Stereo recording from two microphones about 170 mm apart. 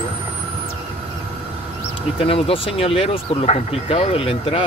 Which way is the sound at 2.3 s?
35° left (ahead or behind).